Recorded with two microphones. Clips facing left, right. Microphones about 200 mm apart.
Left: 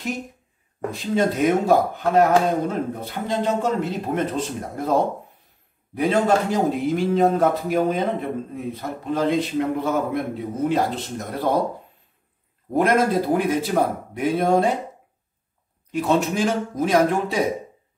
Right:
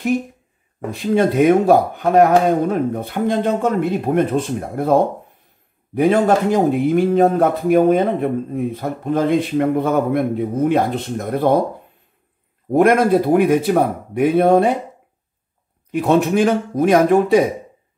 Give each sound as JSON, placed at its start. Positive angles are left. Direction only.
{"t": 0.9, "sound": "speech", "side_deg": -55}
{"t": 12.7, "sound": "speech", "side_deg": -60}
{"t": 15.9, "sound": "speech", "side_deg": -60}